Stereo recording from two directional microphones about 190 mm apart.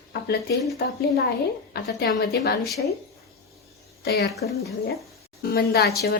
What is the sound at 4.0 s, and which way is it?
Speech, 55° left (ahead or behind).